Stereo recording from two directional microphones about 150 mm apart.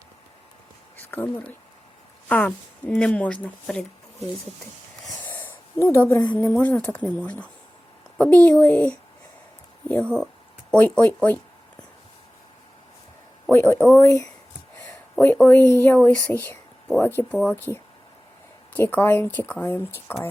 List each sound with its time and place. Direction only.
0.9 s a woman's voice: 10° left (ahead or behind)
5.2 s a sound: 10° left (ahead or behind)
6.3 s a woman's voice: 10° left (ahead or behind)
13.5 s a woman's voice: 15° left (ahead or behind)